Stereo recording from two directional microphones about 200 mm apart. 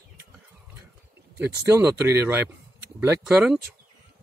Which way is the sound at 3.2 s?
Centre (ahead or behind).